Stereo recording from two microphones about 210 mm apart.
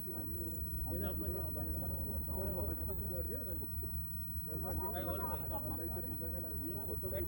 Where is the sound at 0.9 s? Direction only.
30° right (ahead or behind).